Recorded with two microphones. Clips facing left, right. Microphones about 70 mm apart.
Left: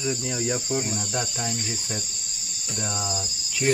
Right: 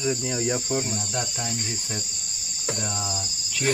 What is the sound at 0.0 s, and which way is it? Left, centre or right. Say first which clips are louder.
Cricket: right 2 dB; centre.